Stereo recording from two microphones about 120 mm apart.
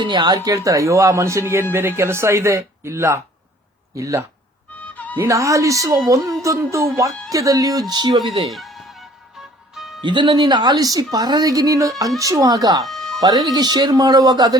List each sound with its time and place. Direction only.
0.0 s a woman's voice: 40° right (ahead or behind)
0.3 s speech: 30° right (ahead or behind)
4.8 s music: 15° left (ahead or behind)
5.1 s a woman's voice: 25° right (ahead or behind)
8.3 s music: centre (ahead or behind)
10.0 s a woman's voice: 40° right (ahead or behind)
12.8 s music: centre (ahead or behind)
13.2 s a woman's voice: 35° right (ahead or behind)